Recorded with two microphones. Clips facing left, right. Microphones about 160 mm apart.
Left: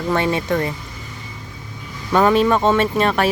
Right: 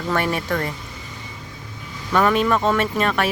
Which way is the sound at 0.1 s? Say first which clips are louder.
Left 3 dB; 20° left (ahead or behind).